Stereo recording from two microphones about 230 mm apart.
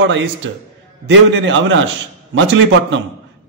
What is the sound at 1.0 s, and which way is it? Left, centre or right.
A man's voice, right.